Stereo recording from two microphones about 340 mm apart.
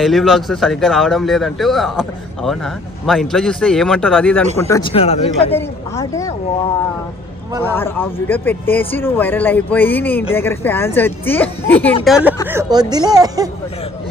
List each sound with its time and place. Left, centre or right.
0.0 s a man's voice: centre
7.6 s a man's voice: centre